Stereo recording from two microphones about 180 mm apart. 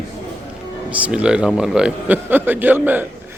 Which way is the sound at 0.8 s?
5° right (ahead or behind).